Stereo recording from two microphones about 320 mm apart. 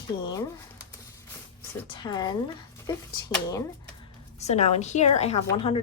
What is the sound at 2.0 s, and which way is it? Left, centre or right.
Speech, centre.